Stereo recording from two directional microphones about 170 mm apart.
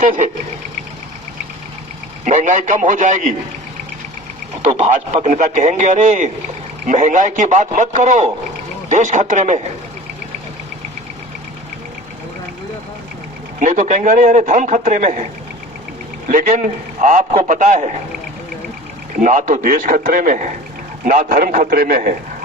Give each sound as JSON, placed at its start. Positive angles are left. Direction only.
{"t": 0.0, "sound": "a man's voice", "side_deg": -50}
{"t": 2.2, "sound": "a man's voice", "side_deg": -45}
{"t": 4.8, "sound": "a man's voice", "side_deg": -40}
{"t": 13.6, "sound": "a man's voice", "side_deg": -50}
{"t": 16.3, "sound": "a man's voice", "side_deg": -50}
{"t": 19.2, "sound": "a man's voice", "side_deg": -50}